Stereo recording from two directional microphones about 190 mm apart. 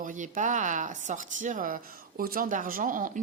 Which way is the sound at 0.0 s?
45° right (ahead or behind).